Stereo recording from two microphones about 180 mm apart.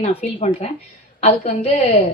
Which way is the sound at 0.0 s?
35° left (ahead or behind).